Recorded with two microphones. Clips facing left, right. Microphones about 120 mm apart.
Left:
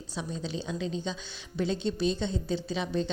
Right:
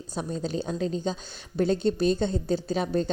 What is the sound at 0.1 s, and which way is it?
A woman's voice, 50° right (ahead or behind).